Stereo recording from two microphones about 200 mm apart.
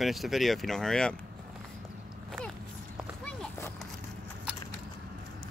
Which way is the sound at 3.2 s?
10° left (ahead or behind).